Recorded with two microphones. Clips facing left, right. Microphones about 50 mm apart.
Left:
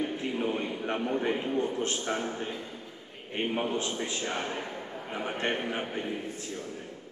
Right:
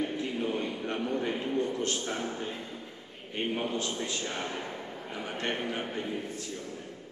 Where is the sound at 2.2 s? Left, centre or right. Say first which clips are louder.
Left 1 dB; centre.